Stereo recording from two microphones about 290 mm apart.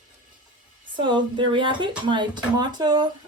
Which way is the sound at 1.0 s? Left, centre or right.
Centre.